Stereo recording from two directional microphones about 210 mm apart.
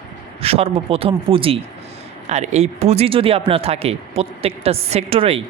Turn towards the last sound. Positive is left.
turn(degrees=-25)  # may be behind; listen again after turning